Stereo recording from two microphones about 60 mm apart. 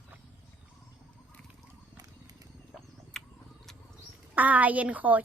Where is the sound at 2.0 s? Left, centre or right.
Right.